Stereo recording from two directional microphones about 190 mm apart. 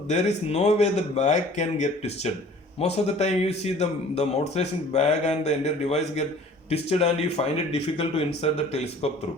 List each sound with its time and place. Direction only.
0.1 s a man's voice: 35° left (ahead or behind)